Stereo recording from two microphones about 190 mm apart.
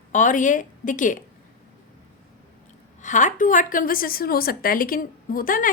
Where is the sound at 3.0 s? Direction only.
40° left (ahead or behind).